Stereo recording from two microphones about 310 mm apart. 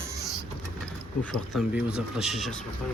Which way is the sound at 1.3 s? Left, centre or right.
Centre.